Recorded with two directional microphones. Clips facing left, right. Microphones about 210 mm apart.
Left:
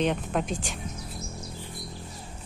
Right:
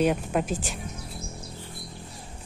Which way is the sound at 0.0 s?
5° right (ahead or behind).